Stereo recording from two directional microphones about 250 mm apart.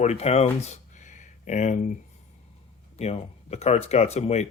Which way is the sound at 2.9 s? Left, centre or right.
Left.